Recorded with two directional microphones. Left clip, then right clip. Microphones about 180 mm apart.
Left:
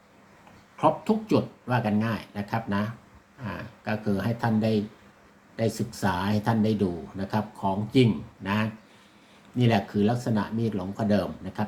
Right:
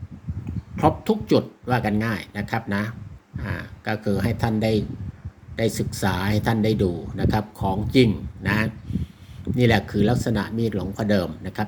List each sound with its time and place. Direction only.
0.8 s speech: 40° right (ahead or behind)